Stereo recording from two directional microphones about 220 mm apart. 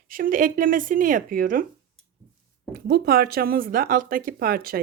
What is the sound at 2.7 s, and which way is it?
Speech, 45° right (ahead or behind).